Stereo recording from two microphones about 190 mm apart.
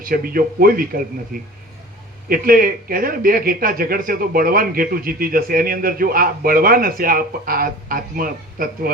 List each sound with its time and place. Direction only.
0.0 s speech: 50° right (ahead or behind)